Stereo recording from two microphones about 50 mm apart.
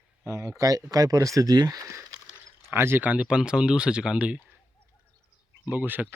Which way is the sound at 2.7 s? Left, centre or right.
Right.